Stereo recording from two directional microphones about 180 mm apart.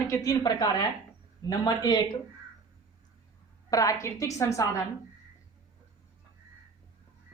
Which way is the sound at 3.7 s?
20° left (ahead or behind).